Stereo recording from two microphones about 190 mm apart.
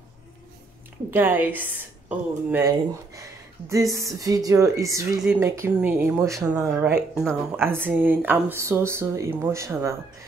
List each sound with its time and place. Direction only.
1.1 s speech: 10° right (ahead or behind)
3.2 s a sound: 15° right (ahead or behind)
3.9 s speech: 15° right (ahead or behind)